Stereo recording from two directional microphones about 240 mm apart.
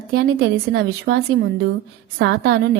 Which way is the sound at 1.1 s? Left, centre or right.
Right.